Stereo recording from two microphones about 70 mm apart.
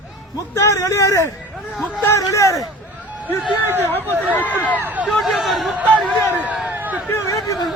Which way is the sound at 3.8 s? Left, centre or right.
Left.